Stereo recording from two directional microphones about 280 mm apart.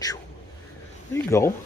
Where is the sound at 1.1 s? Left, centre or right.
Centre.